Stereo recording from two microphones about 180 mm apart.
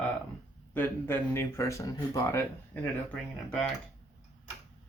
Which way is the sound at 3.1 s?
5° left (ahead or behind).